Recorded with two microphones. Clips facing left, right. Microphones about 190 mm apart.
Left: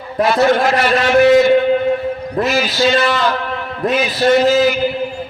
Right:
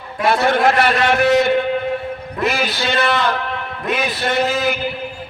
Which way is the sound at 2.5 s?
55° right (ahead or behind).